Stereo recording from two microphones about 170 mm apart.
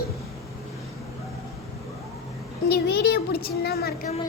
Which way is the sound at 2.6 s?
70° left (ahead or behind).